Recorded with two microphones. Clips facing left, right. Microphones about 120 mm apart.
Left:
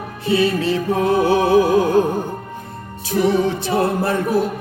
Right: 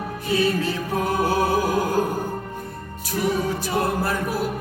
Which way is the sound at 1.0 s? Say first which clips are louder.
Left 5 dB; 25° left (ahead or behind).